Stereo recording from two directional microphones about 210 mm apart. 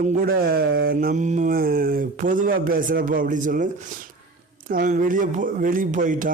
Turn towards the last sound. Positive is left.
turn(degrees=-35)  # may be behind; listen again after turning